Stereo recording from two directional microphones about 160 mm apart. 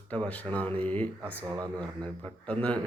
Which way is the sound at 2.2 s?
10° left (ahead or behind).